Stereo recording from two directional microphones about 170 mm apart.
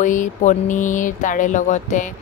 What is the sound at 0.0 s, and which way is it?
Speech, 50° left (ahead or behind).